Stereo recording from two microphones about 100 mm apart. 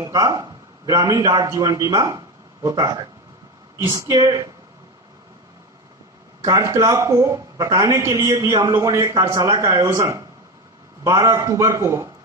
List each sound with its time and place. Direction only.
0.0 s a man's voice: 40° right (ahead or behind)
4.1 s speech: 40° right (ahead or behind)
6.4 s a man's voice: 35° right (ahead or behind)